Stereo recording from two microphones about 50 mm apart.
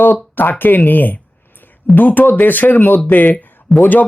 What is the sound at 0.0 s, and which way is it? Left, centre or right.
Speech, left.